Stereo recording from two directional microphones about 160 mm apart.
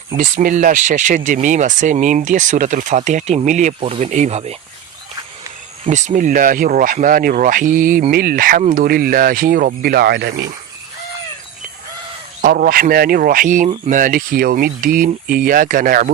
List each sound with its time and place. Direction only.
0.2 s speech: 55° right (ahead or behind); by 4.5 s 40° right (ahead or behind)
5.9 s speech: 50° right (ahead or behind); by 10.3 s 90° right
12.4 s speech: 60° right (ahead or behind)